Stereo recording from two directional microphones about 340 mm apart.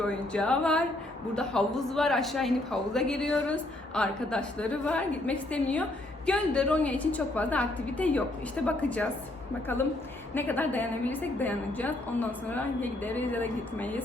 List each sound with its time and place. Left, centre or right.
0.0 s a woman's voice: centre
10.3 s a woman's voice: centre